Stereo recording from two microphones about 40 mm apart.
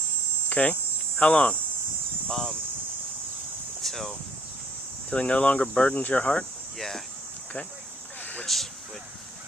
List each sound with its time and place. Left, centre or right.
0.5 s cricket: left
2.3 s speech: centre
3.8 s speech: centre
5.1 s speech: left
6.7 s a sound: centre
8.2 s a sound: left